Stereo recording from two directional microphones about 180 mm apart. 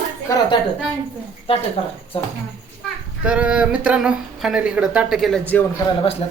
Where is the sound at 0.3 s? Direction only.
20° left (ahead or behind).